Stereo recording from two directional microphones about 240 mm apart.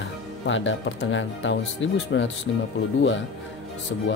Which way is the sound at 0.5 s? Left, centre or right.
Left.